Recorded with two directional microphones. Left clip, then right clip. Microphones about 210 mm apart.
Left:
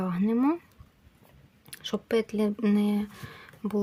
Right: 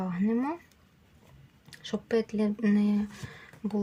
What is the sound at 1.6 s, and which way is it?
Speech, 20° left (ahead or behind).